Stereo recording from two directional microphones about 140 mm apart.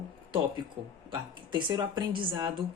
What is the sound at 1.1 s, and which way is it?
A woman's voice, 35° right (ahead or behind).